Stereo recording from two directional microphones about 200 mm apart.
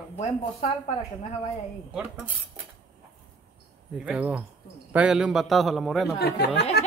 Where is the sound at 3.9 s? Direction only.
5° right (ahead or behind).